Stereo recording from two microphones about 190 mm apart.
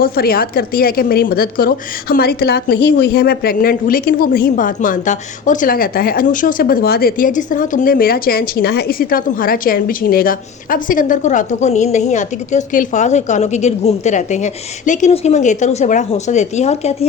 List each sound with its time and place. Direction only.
0.0 s a woman's voice: 50° left (ahead or behind); by 17.1 s 35° left (ahead or behind)